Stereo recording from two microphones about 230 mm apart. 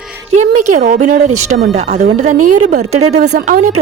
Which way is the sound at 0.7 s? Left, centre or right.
Right.